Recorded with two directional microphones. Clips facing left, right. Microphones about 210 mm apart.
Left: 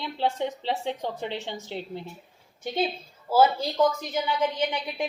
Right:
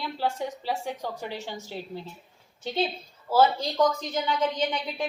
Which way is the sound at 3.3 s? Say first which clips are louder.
Left 1 dB; 10° left (ahead or behind).